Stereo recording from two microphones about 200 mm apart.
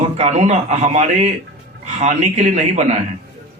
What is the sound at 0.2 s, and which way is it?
A man's voice, 35° right (ahead or behind).